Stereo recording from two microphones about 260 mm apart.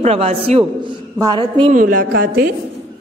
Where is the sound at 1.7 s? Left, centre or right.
Right.